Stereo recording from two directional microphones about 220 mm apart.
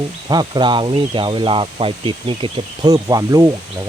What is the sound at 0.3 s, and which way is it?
Speech, 20° right (ahead or behind).